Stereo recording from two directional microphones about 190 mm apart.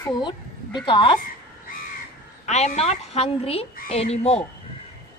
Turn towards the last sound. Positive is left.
turn(degrees=35)  # may be behind; listen again after turning